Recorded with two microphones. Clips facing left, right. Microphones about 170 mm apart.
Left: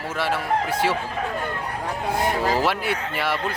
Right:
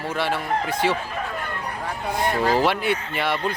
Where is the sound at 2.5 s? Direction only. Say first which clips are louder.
Right 2 dB; 5° left (ahead or behind).